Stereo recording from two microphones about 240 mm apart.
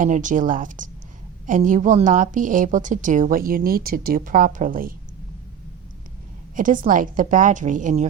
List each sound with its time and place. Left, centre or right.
0.0 s a woman's voice: right
6.6 s a woman's voice: right